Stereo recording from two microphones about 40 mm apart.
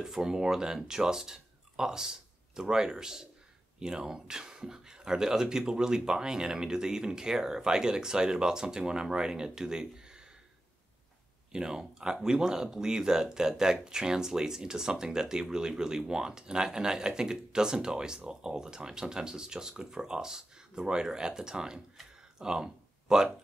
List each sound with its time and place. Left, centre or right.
0.0 s speech: centre
11.5 s speech: centre
21.9 s a sound: centre